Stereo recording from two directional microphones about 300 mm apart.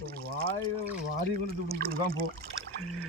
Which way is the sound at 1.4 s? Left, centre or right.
Right.